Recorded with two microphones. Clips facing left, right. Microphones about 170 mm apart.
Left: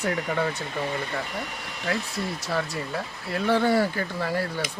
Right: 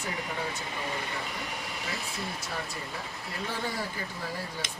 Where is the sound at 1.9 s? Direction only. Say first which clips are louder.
Left 12 dB; 65° left (ahead or behind).